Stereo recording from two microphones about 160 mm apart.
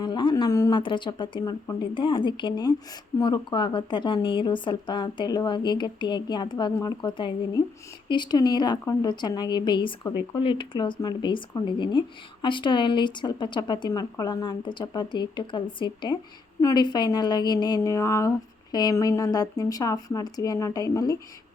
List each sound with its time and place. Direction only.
0.0 s speech: 30° left (ahead or behind)